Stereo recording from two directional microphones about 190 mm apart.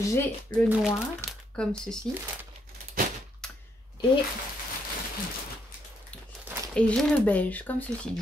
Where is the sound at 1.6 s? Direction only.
5° left (ahead or behind).